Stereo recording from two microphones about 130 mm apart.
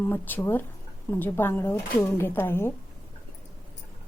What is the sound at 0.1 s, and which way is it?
A woman's voice, 15° left (ahead or behind).